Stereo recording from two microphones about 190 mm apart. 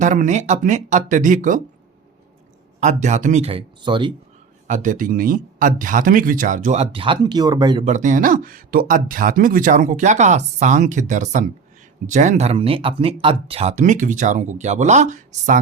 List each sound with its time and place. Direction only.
0.0 s speech: 40° right (ahead or behind)
2.8 s speech: 40° right (ahead or behind)
4.7 s speech: 40° right (ahead or behind); by 7.9 s 20° right (ahead or behind)
7.9 s speech: 40° right (ahead or behind)